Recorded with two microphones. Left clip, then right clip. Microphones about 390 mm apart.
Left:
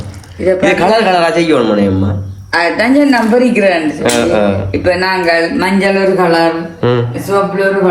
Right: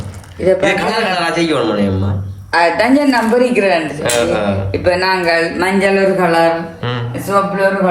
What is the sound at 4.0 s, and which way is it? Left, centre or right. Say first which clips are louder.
Speech: left 4 dB; centre.